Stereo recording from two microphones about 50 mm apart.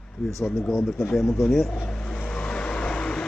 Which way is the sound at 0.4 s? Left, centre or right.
Centre.